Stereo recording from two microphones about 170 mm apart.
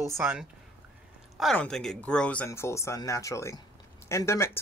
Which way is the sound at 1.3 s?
5° left (ahead or behind).